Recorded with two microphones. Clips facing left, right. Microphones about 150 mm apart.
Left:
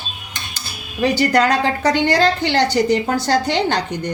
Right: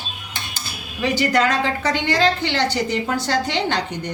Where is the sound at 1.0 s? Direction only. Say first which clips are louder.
Left 3 dB; 40° left (ahead or behind).